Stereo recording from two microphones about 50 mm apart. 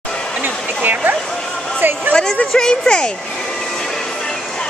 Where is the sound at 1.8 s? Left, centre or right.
Right.